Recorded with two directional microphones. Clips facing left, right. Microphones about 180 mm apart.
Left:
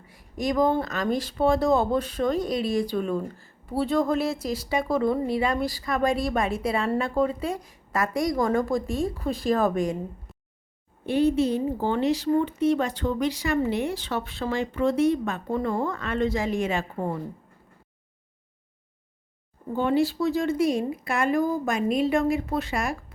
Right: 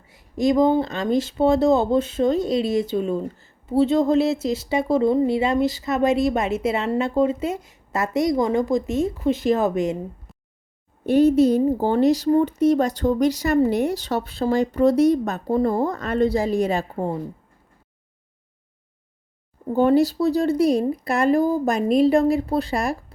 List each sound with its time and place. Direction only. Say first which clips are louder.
0.0 s speech: right 8 dB; 25° right (ahead or behind)
11.0 s a woman's voice: right 6 dB; 45° right (ahead or behind)
19.7 s a woman's voice: right 6 dB; 40° right (ahead or behind)